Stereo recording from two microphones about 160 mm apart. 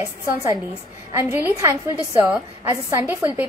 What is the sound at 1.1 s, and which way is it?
A woman's voice, 15° right (ahead or behind).